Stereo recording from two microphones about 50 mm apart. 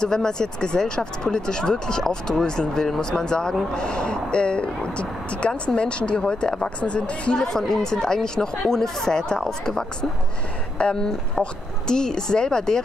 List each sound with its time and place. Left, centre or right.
0.0 s speech: centre
7.4 s speech: centre